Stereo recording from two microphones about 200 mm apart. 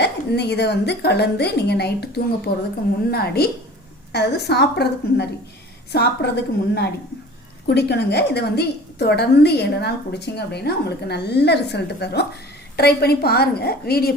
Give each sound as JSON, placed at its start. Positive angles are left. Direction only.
{"t": 0.0, "sound": "a woman's voice", "side_deg": 55}